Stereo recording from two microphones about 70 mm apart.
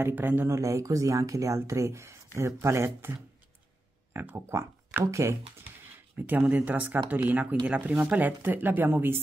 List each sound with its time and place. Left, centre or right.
0.0 s speech: right
0.5 s speech: right
6.1 s speech: right